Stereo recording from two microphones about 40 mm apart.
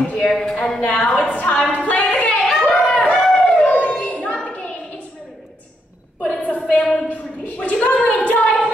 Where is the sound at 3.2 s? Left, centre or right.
Centre.